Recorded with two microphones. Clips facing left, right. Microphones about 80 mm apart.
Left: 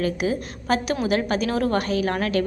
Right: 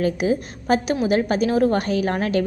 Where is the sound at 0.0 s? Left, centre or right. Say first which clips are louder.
Right 3 dB; right.